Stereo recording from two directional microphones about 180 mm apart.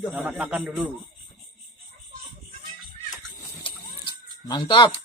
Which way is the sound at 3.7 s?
25° left (ahead or behind).